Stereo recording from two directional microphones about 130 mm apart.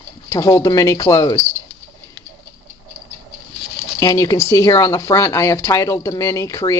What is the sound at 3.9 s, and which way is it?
Speech, 25° left (ahead or behind).